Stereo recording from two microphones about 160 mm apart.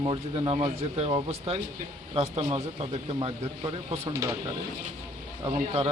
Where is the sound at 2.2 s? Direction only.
40° right (ahead or behind).